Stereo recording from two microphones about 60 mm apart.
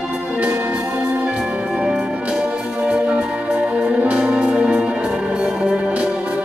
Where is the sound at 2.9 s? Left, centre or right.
Centre.